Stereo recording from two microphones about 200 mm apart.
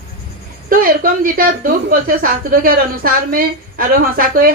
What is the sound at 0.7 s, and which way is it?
A woman's voice, 45° right (ahead or behind).